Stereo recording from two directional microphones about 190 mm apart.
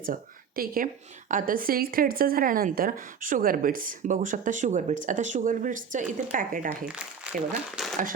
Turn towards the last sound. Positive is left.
turn(degrees=0)  # may be behind; listen again after turning